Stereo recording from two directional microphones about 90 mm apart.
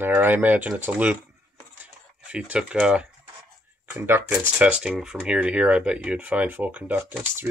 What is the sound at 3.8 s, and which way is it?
Speech, 25° right (ahead or behind).